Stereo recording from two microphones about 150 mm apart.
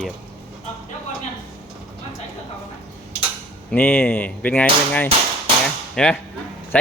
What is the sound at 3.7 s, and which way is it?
Speech, 10° left (ahead or behind).